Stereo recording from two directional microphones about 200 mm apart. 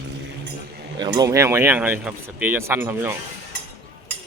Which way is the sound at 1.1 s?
15° right (ahead or behind).